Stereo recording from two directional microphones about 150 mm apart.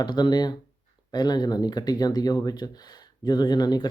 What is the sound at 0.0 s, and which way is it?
Speech, 30° left (ahead or behind).